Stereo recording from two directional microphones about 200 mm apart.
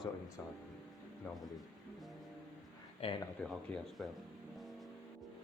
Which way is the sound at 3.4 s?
5° left (ahead or behind).